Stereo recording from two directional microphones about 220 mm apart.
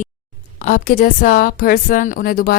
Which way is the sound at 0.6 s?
35° left (ahead or behind).